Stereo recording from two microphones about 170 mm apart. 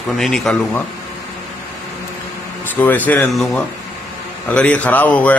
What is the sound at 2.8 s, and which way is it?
A man's voice, 10° left (ahead or behind).